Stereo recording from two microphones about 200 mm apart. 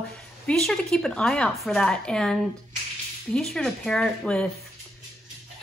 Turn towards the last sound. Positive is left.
turn(degrees=5)  # may be behind; listen again after turning